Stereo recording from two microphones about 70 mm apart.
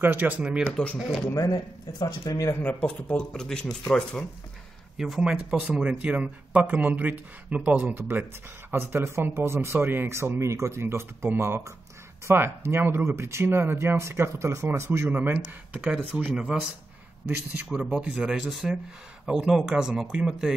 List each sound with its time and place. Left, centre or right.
0.0 s speech: right
0.9 s speech: centre
1.3 s speech: left
2.0 s speech: left
2.6 s speech: left
3.3 s speech: centre
4.9 s speech: centre
7.9 s speech: right
15.4 s speech: centre
17.6 s speech: centre
18.4 s speech: centre